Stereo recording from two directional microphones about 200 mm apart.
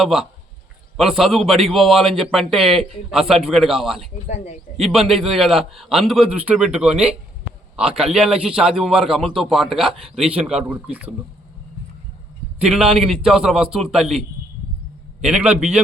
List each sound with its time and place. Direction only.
0.0 s a man's voice: centre (ahead or behind)
4.3 s speech: 35° left (ahead or behind)
4.9 s a man's voice: centre (ahead or behind)
12.6 s a man's voice: 5° right (ahead or behind)
15.2 s a man's voice: 5° right (ahead or behind)